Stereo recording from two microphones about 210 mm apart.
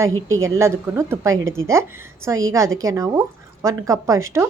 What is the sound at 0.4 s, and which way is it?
A woman's voice, 15° right (ahead or behind).